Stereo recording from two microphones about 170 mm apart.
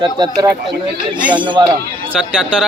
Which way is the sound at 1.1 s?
10° right (ahead or behind).